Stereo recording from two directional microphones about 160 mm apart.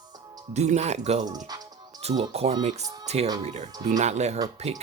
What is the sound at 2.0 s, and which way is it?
Speech, 40° right (ahead or behind).